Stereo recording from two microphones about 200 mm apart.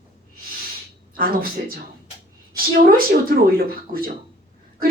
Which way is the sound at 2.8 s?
45° right (ahead or behind).